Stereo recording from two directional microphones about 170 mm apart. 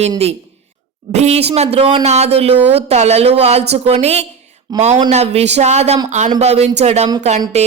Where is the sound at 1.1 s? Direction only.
40° right (ahead or behind).